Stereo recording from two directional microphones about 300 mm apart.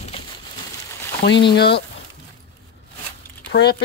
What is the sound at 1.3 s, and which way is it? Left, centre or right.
Speech, left.